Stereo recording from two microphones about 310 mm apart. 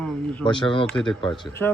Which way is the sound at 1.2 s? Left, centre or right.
Centre.